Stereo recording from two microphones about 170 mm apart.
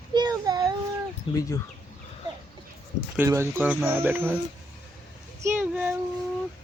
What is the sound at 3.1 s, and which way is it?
Speech, 15° right (ahead or behind).